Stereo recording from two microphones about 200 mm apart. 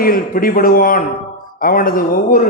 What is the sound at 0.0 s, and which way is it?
A man's voice, 45° left (ahead or behind).